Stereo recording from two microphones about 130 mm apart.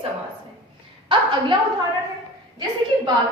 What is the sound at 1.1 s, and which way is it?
Speech, 40° right (ahead or behind).